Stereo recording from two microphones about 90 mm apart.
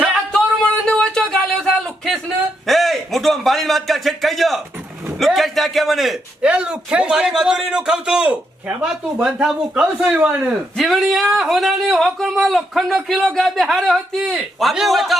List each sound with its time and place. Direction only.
0.3 s a sound: 10° left (ahead or behind)
2.6 s a man's voice: centre (ahead or behind)
6.4 s a man's voice: 10° right (ahead or behind)
10.0 s a man's voice: 15° right (ahead or behind)
10.8 s speech: centre (ahead or behind)